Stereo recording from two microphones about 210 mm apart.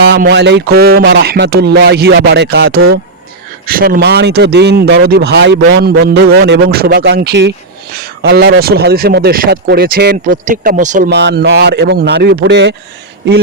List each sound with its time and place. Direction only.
0.2 s speech: 55° right (ahead or behind)
11.1 s speech: 55° right (ahead or behind)